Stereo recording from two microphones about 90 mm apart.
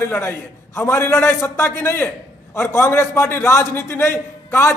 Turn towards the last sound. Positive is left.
turn(degrees=30)  # may be behind; listen again after turning